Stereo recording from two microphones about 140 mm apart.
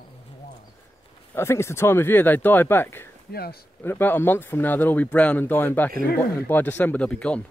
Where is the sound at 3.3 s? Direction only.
90° left.